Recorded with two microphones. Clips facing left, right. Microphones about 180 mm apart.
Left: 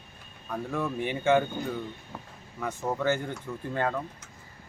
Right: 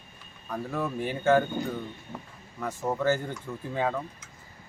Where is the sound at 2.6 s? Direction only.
5° right (ahead or behind).